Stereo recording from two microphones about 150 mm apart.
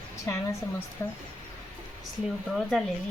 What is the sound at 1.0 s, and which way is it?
Speech, 15° left (ahead or behind).